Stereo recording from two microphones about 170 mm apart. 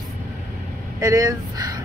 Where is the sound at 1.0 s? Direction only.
20° right (ahead or behind).